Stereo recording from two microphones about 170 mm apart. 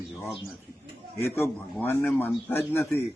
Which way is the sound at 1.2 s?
15° left (ahead or behind).